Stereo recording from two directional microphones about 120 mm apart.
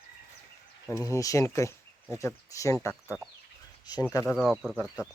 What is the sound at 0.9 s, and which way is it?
Speech, 25° left (ahead or behind).